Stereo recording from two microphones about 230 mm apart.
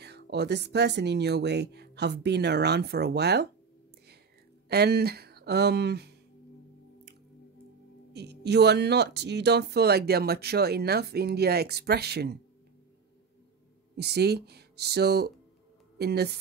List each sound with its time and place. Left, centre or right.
0.0 s speech: right
4.6 s speech: right
8.1 s speech: right
13.9 s speech: right